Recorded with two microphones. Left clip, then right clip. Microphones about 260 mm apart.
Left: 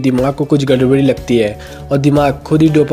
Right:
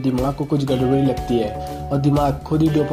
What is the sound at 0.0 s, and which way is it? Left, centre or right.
Speech, left.